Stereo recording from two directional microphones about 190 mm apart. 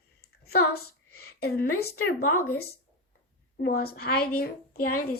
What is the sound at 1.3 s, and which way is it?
Speech, 55° left (ahead or behind).